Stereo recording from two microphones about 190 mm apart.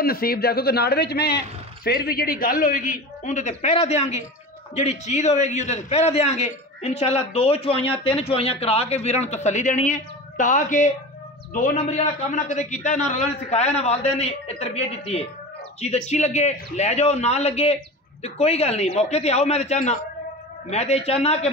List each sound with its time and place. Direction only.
0.0 s a man's voice: 50° left (ahead or behind); by 21.5 s 30° left (ahead or behind)